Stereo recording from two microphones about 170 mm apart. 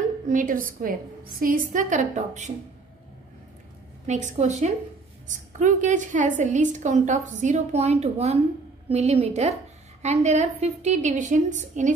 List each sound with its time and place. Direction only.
0.3 s a woman's voice: 50° right (ahead or behind)
4.1 s a woman's voice: 45° right (ahead or behind)